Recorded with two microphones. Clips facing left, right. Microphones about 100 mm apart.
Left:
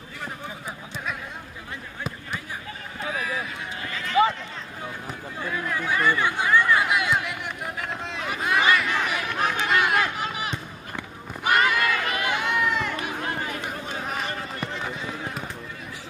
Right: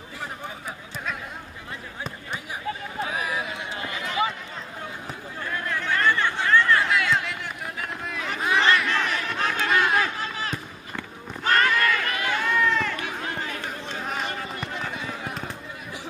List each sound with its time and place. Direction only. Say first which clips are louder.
3.9 s run: left 7 dB; 15° right (ahead or behind)
5.0 s a sound: left 1 dB; 5° left (ahead or behind)
8.3 s crowd: even; 5° left (ahead or behind)
9.7 s run: right 1 dB; 10° left (ahead or behind)